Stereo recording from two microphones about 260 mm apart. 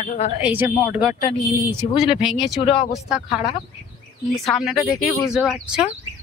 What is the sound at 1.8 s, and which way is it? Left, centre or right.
Speech, left.